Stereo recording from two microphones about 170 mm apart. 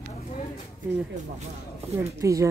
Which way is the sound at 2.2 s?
15° right (ahead or behind).